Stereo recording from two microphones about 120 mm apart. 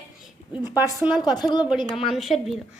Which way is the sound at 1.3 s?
35° left (ahead or behind).